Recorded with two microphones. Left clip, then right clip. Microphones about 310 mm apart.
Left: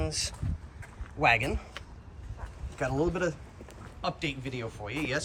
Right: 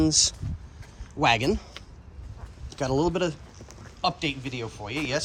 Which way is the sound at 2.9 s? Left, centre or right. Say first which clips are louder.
Right 5 dB; centre.